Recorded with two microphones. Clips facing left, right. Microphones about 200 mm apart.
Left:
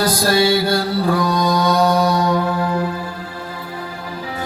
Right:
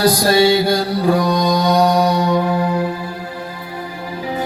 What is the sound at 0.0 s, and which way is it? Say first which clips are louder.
Music: right 3 dB; 15° right (ahead or behind).